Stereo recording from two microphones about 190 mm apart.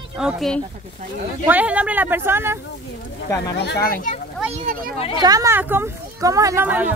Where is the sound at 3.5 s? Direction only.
55° left (ahead or behind).